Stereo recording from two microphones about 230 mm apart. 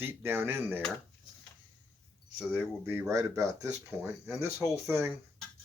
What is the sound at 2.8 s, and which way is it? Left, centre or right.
Speech, centre.